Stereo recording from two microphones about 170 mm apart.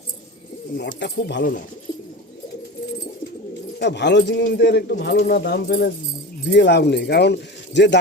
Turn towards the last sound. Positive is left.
turn(degrees=90)